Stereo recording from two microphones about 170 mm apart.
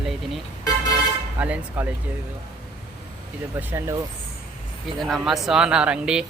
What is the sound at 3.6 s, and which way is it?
Speech, 15° right (ahead or behind).